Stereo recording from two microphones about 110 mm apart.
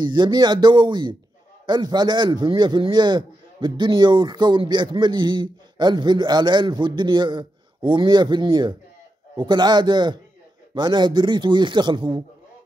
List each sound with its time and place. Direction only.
0.0 s a man's voice: 45° right (ahead or behind)